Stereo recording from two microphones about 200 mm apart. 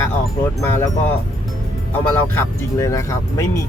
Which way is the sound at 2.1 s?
15° left (ahead or behind).